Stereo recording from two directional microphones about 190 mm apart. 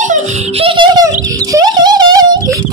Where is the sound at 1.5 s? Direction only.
20° right (ahead or behind).